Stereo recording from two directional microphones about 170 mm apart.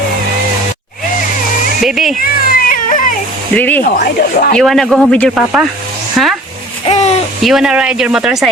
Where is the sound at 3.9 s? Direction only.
55° left (ahead or behind).